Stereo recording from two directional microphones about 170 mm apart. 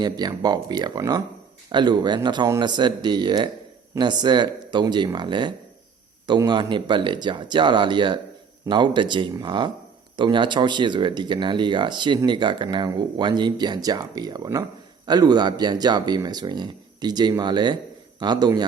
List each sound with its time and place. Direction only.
0.0 s speech: 25° right (ahead or behind)